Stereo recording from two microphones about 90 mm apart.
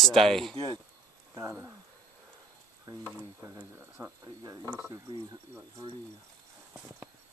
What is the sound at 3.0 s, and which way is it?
Speech, 25° right (ahead or behind).